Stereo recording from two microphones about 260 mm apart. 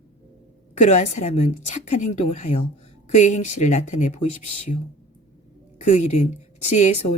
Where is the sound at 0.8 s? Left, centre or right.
Left.